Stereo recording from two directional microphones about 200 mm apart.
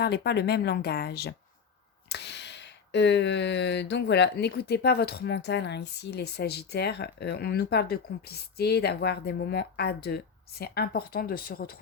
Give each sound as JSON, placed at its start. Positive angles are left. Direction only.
{"t": 0.0, "sound": "speech", "side_deg": 55}